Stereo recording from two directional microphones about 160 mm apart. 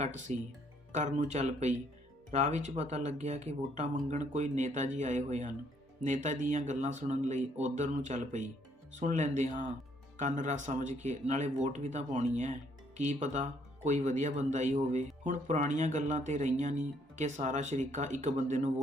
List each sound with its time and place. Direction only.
0.0 s speech: 50° right (ahead or behind)